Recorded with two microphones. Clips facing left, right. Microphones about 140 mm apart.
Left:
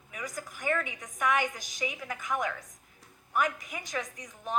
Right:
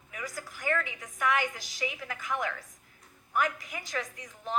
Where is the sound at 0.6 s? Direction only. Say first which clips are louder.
Even; 20° left (ahead or behind).